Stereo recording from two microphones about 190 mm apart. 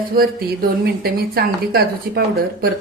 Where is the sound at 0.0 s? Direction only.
50° right (ahead or behind).